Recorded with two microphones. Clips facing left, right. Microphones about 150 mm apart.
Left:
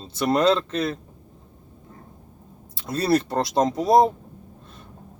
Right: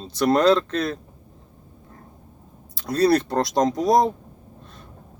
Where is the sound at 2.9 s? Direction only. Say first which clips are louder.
Right 5 dB; 25° left (ahead or behind).